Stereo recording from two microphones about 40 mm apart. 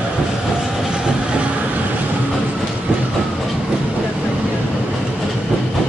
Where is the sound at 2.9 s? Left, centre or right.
Right.